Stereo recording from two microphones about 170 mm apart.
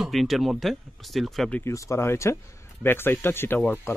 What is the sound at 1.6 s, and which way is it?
Speech, 15° left (ahead or behind).